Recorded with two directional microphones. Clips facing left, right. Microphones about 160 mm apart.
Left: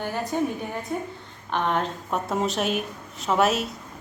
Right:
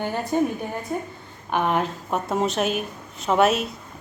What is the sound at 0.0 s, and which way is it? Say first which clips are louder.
A woman's voice: right 3 dB; 15° right (ahead or behind).